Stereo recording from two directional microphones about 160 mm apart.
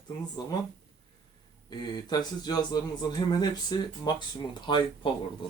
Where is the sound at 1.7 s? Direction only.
25° left (ahead or behind).